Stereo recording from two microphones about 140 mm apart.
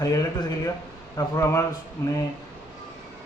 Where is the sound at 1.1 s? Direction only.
20° left (ahead or behind).